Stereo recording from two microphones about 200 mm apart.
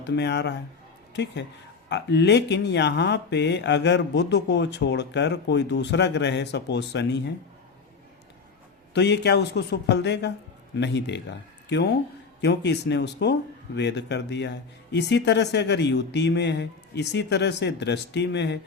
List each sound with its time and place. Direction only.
0.1 s speech: 60° left (ahead or behind)
8.9 s speech: 60° left (ahead or behind)